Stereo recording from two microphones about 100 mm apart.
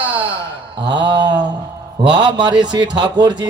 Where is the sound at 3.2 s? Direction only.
50° right (ahead or behind).